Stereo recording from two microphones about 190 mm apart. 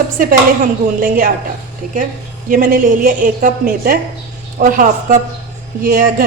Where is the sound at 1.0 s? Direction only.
45° right (ahead or behind).